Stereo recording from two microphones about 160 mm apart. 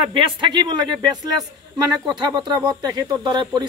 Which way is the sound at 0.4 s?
30° right (ahead or behind).